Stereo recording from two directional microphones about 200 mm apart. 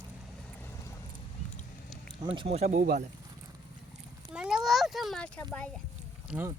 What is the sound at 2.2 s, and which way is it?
Speech, 25° right (ahead or behind).